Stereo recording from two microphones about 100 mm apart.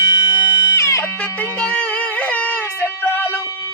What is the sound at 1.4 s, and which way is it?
Music, 15° left (ahead or behind).